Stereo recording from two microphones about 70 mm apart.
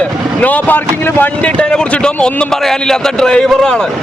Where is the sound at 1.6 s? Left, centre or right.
Centre.